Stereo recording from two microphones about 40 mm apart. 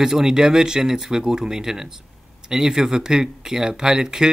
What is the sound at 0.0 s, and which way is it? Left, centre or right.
Speech, centre.